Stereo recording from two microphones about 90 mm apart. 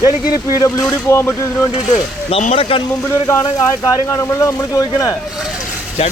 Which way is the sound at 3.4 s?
45° left (ahead or behind).